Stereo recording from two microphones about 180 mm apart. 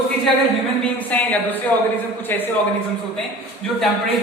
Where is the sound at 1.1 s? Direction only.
10° left (ahead or behind).